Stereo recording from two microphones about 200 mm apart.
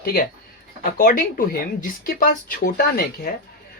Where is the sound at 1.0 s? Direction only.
45° left (ahead or behind).